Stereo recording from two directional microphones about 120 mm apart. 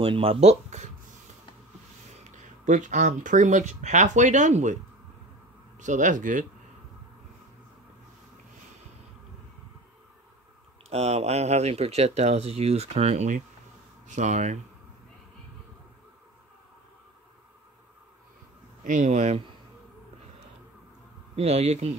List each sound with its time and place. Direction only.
0.0 s speech: 50° right (ahead or behind); by 0.8 s 70° right (ahead or behind)
2.2 s speech: 85° right
5.8 s speech: 90° right
10.9 s speech: 60° right (ahead or behind)
14.0 s speech: 85° right
18.9 s speech: 80° right
21.4 s speech: 60° right (ahead or behind)